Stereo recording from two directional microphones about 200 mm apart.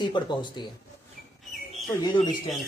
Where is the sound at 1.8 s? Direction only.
20° left (ahead or behind).